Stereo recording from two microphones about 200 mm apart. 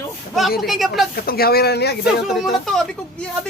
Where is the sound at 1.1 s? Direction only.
50° left (ahead or behind).